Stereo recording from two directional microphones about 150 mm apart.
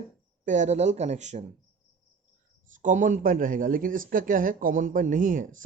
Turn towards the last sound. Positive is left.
turn(degrees=-60)  # may be behind; listen again after turning